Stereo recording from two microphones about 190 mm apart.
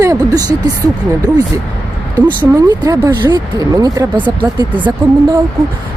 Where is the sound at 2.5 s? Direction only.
20° right (ahead or behind).